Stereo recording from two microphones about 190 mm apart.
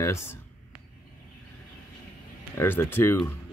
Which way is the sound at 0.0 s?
15° left (ahead or behind).